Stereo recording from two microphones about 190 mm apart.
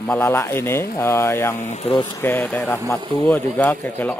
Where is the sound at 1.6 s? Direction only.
40° left (ahead or behind).